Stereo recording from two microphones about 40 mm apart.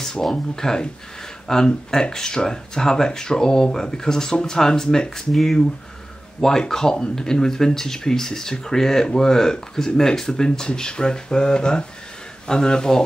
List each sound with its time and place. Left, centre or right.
0.0 s speech: centre
6.7 s speech: centre